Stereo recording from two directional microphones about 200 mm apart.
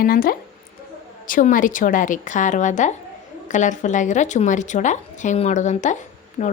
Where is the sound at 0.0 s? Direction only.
45° left (ahead or behind).